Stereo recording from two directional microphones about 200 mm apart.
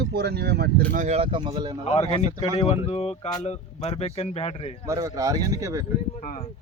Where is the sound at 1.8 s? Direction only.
30° left (ahead or behind).